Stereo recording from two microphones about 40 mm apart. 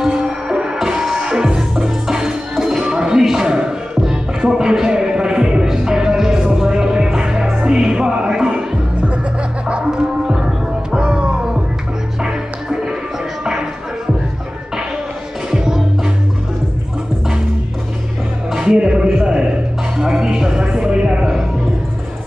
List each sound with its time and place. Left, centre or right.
0.0 s music: centre
10.2 s music: centre
15.5 s music: centre
18.5 s music: centre